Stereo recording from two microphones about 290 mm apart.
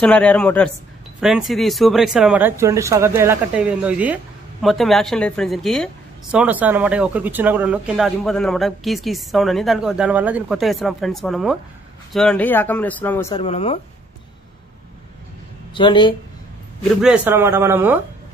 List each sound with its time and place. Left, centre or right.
0.0 s speech: centre
13.4 s speech: centre
15.7 s speech: centre
17.0 s speech: centre